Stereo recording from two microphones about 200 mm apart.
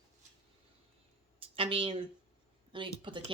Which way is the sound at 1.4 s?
25° right (ahead or behind).